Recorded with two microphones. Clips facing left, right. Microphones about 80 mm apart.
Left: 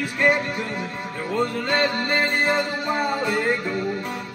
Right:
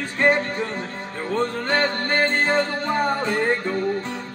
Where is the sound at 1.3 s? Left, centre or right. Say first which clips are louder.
Right 1 dB; centre.